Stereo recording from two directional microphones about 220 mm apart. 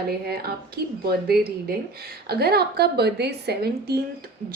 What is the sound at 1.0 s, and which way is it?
A woman's voice, 45° right (ahead or behind).